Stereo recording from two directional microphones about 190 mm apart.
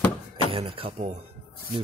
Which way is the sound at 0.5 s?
30° right (ahead or behind).